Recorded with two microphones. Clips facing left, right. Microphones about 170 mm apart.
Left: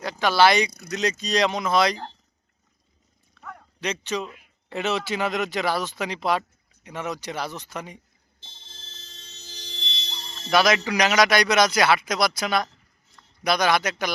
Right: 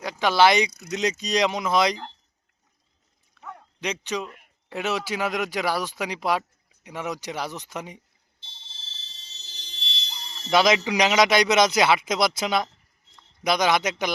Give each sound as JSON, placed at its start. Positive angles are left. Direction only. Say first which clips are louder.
{"t": 0.0, "sound": "a man's voice", "louder": "even", "side_deg": -15}
{"t": 3.5, "sound": "bow-wow", "louder": "left 1 dB", "side_deg": -15}
{"t": 4.7, "sound": "speech", "louder": "left 1 dB", "side_deg": -10}
{"t": 8.4, "sound": "fire alarm", "louder": "left 2 dB", "side_deg": 50}
{"t": 10.5, "sound": "a man's voice", "louder": "even", "side_deg": -20}